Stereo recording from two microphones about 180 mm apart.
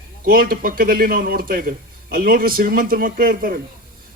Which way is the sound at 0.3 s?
55° right (ahead or behind).